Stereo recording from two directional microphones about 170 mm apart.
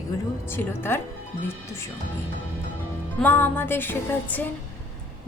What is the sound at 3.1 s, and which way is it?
A woman's voice, 10° left (ahead or behind).